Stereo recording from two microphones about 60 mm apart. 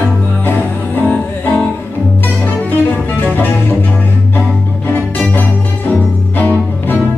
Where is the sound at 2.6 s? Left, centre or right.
Left.